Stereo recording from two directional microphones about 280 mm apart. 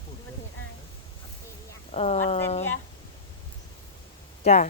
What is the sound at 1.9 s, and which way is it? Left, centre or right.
Speech, left.